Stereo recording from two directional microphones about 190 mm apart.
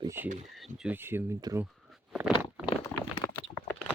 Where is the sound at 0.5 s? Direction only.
Centre (ahead or behind).